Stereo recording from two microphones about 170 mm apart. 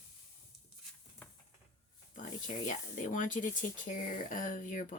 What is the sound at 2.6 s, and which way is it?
Speech, 50° left (ahead or behind).